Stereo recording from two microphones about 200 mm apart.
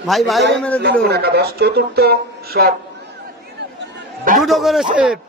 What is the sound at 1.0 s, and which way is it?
Speech, 55° right (ahead or behind).